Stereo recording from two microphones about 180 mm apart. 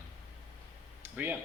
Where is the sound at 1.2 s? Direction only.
10° right (ahead or behind).